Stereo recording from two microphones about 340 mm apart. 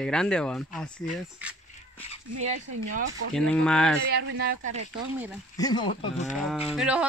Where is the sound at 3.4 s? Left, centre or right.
Centre.